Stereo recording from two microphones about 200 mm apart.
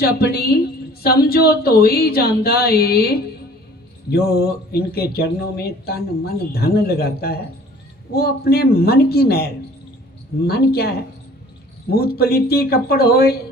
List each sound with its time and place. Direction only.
0.0 s speech: 50° left (ahead or behind)